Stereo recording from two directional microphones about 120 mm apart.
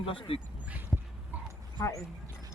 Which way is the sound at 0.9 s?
15° left (ahead or behind).